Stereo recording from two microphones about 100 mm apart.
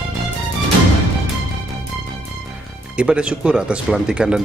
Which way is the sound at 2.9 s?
10° right (ahead or behind).